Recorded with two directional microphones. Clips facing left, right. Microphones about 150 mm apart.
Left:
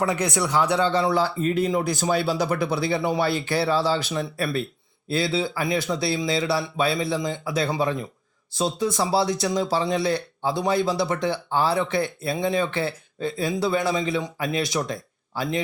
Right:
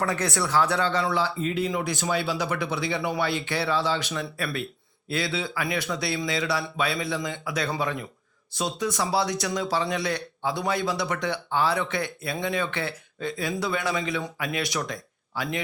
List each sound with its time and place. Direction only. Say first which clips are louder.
0.0 s speech: left 3 dB; 15° left (ahead or behind)
1.1 s speech: left 4 dB; 45° left (ahead or behind)